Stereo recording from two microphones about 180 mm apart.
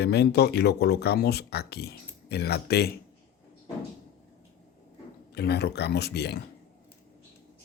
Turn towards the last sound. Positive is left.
turn(degrees=65)  # may be behind; listen again after turning